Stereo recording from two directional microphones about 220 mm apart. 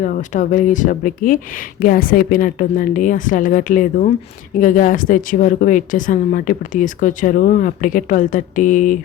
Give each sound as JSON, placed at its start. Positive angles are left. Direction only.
{"t": 0.0, "sound": "a woman's voice", "side_deg": 35}